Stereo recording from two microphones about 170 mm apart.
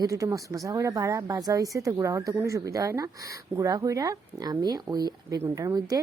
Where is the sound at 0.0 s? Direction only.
20° right (ahead or behind).